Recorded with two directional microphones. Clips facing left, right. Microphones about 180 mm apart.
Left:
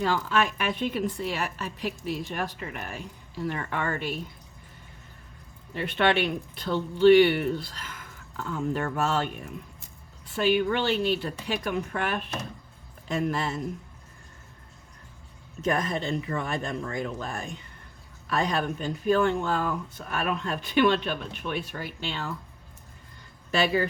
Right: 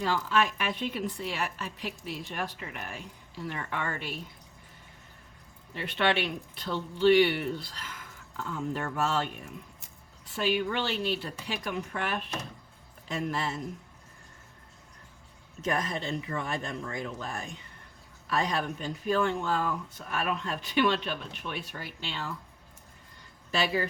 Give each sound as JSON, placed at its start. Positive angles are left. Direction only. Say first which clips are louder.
{"t": 0.0, "sound": "a woman's voice", "louder": "left 2 dB", "side_deg": 55}
{"t": 5.7, "sound": "a woman's voice", "louder": "left 4 dB", "side_deg": 50}
{"t": 10.3, "sound": "a woman's voice", "louder": "left 5 dB", "side_deg": 55}
{"t": 15.6, "sound": "a woman's voice", "louder": "left 4 dB", "side_deg": 50}
{"t": 23.5, "sound": "speech", "louder": "left 4 dB", "side_deg": 55}